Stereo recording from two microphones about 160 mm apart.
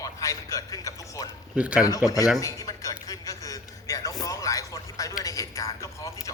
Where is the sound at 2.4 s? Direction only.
20° left (ahead or behind).